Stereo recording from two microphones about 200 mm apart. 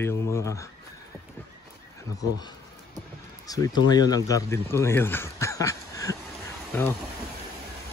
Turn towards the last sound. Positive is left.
turn(degrees=10)  # may be behind; listen again after turning